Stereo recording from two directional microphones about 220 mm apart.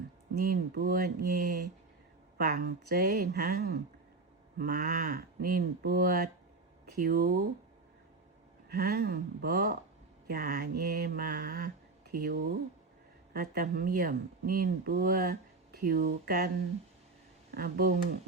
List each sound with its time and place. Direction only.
0.3 s speech: 40° right (ahead or behind)
8.7 s speech: 45° right (ahead or behind)
17.5 s speech: 45° right (ahead or behind)